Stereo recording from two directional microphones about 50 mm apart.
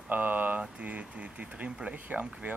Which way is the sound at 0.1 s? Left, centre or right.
Right.